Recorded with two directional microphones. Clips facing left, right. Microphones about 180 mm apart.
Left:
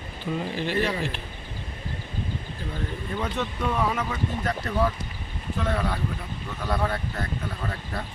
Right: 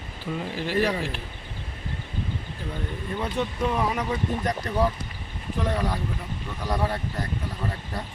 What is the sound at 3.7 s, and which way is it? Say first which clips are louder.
Speech: right 1 dB; 10° right (ahead or behind).